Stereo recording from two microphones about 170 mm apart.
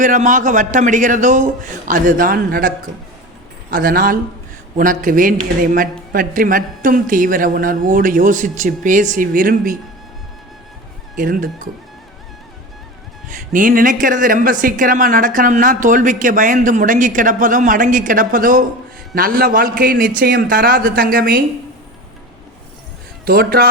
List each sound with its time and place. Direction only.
0.0 s a man's voice: 50° right (ahead or behind)
11.2 s speech: 55° right (ahead or behind)
13.5 s a man's voice: 50° right (ahead or behind)
23.2 s a man's voice: 65° right (ahead or behind)